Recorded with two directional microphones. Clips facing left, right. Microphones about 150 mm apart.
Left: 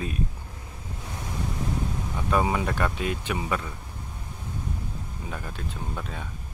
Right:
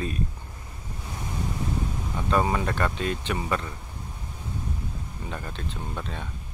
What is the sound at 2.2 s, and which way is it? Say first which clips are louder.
Speech: even; 5° left (ahead or behind).